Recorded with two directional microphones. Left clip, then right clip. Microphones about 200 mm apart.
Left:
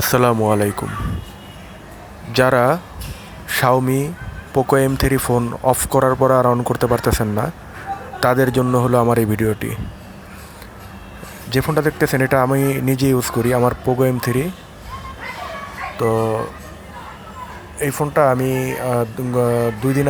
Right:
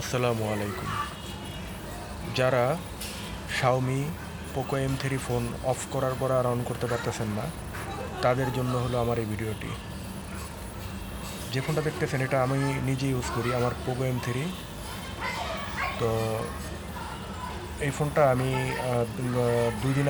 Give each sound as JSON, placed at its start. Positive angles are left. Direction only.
{"t": 0.0, "sound": "speech", "side_deg": 45}
{"t": 2.3, "sound": "speech", "side_deg": 45}
{"t": 8.2, "sound": "speech", "side_deg": 45}
{"t": 11.5, "sound": "speech", "side_deg": 45}
{"t": 16.0, "sound": "speech", "side_deg": 40}
{"t": 17.7, "sound": "speech", "side_deg": 40}